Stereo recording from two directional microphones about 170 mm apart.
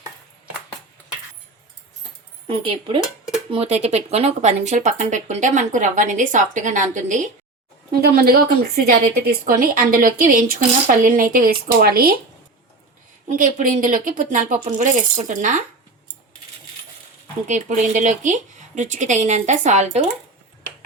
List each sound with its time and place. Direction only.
2.5 s speech: 30° right (ahead or behind); by 7.3 s 50° right (ahead or behind)
8.0 s a woman's voice: 65° right (ahead or behind)
13.2 s speech: 50° right (ahead or behind)
17.4 s speech: 45° right (ahead or behind)